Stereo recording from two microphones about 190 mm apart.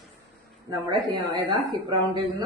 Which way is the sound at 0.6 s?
25° right (ahead or behind).